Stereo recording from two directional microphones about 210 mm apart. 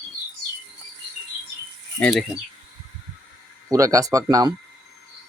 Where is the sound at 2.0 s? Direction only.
5° left (ahead or behind).